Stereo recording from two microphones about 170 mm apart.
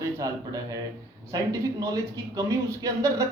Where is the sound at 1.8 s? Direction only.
20° right (ahead or behind).